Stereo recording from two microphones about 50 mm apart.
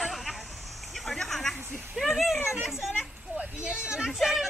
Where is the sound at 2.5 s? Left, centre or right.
Centre.